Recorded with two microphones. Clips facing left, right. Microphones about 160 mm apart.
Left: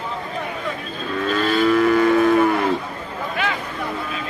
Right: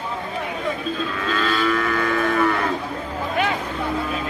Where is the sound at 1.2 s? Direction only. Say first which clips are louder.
Left 5 dB; 35° left (ahead or behind).